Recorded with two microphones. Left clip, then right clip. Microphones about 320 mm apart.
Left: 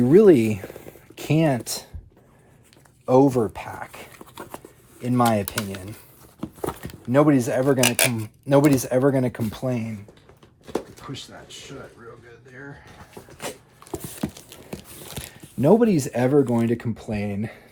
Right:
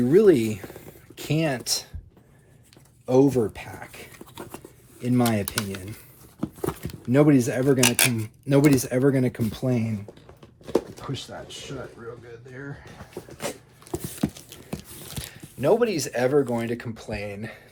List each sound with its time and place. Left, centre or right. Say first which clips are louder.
0.0 s speech: left 3 dB; left
3.1 s speech: left 2 dB; centre
13.9 s a sound: right 1 dB; centre
15.3 s speech: left 3 dB; left